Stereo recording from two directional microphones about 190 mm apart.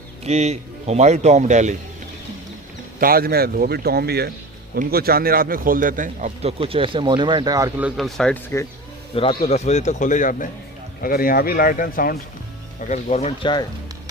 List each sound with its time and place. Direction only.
0.3 s speech: 35° right (ahead or behind)
3.0 s speech: 50° right (ahead or behind); by 7.7 s 20° right (ahead or behind)
7.8 s speech: 5° right (ahead or behind)
9.1 s a man's voice: 30° left (ahead or behind); by 12.1 s 50° left (ahead or behind)
12.9 s a man's voice: 35° left (ahead or behind)